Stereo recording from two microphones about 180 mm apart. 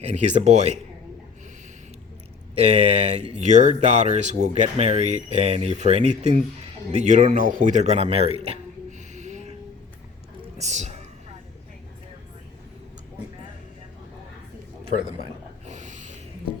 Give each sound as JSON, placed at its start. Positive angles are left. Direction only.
{"t": 0.0, "sound": "speech", "side_deg": -40}
{"t": 2.6, "sound": "a man's voice", "side_deg": -35}
{"t": 10.6, "sound": "music", "side_deg": -40}
{"t": 15.6, "sound": "roaring cats", "side_deg": -40}